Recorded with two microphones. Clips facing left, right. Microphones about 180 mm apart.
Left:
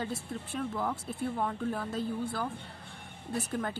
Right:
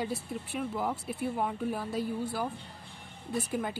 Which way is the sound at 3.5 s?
10° right (ahead or behind).